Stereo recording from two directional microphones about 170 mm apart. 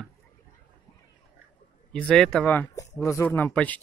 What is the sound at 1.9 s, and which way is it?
Speech, 5° left (ahead or behind).